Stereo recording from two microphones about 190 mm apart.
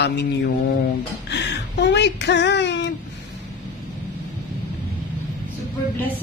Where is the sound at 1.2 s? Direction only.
65° left (ahead or behind).